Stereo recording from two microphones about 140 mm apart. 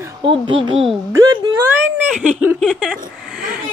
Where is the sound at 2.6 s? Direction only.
Centre (ahead or behind).